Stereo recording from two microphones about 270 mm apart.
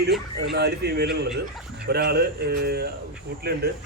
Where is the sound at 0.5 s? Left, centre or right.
Right.